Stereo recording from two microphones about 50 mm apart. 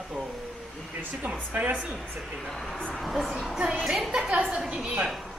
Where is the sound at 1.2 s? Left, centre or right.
Right.